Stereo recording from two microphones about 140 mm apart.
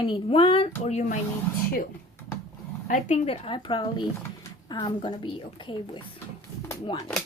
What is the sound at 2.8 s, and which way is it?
A woman's voice, 60° left (ahead or behind).